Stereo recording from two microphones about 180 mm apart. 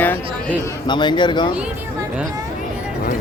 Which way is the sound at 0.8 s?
25° left (ahead or behind).